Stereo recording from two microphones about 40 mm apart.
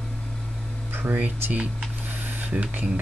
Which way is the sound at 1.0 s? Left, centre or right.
Right.